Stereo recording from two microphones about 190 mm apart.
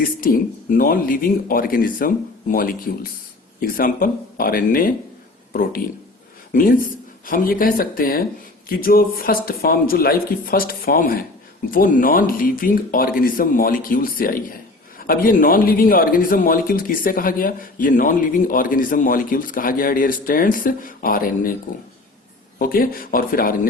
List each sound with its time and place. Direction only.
0.0 s speech: 50° left (ahead or behind)
6.5 s speech: 45° left (ahead or behind)
22.5 s speech: 50° left (ahead or behind)